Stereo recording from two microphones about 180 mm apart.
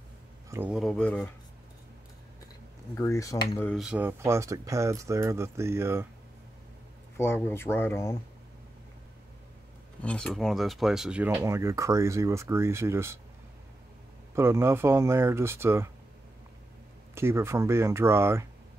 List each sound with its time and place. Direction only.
0.5 s speech: 10° right (ahead or behind)
3.0 s speech: 15° left (ahead or behind)
3.7 s speech: 5° right (ahead or behind)
7.2 s speech: 15° left (ahead or behind)
10.0 s speech: 5° left (ahead or behind); by 13.2 s 15° right (ahead or behind)
14.3 s speech: 15° right (ahead or behind)
17.1 s speech: 15° right (ahead or behind)